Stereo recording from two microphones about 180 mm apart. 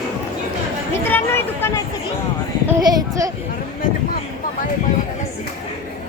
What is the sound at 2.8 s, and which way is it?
Speech, 20° right (ahead or behind).